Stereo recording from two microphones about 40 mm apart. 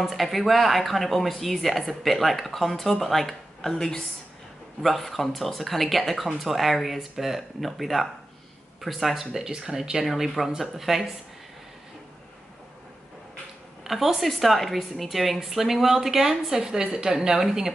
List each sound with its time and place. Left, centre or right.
0.0 s speech: centre
3.7 s a woman's voice: centre
4.8 s speech: centre
10.0 s speech: centre
13.8 s speech: centre
16.5 s speech: right